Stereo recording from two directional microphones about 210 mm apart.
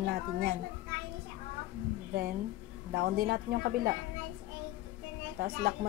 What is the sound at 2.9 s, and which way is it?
A woman's voice, 45° right (ahead or behind).